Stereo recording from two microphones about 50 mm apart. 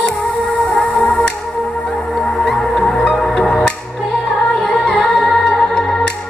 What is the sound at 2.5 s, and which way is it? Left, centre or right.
Music, centre.